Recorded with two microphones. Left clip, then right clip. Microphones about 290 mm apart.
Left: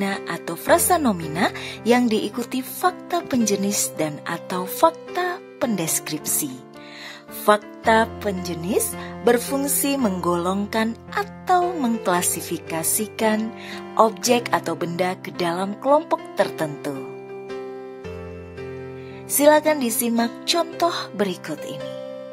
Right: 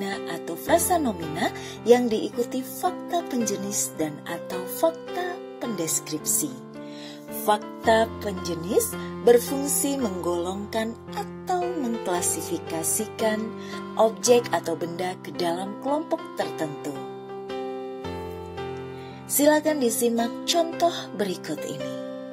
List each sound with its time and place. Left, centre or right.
0.0 s speech: centre
19.3 s speech: centre